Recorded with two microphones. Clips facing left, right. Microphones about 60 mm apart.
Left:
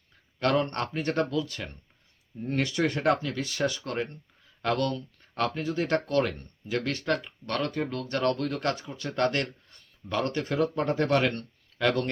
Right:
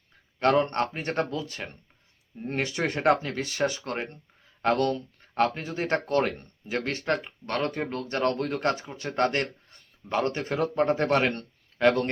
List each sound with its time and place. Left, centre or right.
0.3 s speech: right